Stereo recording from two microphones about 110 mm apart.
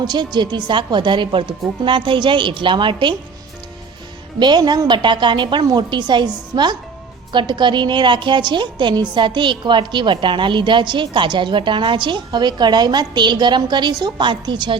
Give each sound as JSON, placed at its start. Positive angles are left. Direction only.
{"t": 0.0, "sound": "a woman's voice", "side_deg": -40}
{"t": 4.4, "sound": "a woman's voice", "side_deg": -40}